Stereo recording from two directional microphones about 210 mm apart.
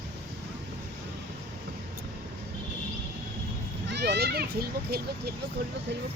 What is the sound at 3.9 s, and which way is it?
A child's voice, 50° right (ahead or behind).